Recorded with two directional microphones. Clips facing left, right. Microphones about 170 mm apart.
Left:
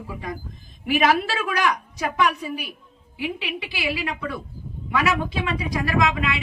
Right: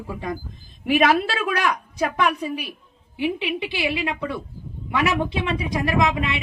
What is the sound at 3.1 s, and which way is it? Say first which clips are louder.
A woman's voice: right 5 dB; 25° right (ahead or behind).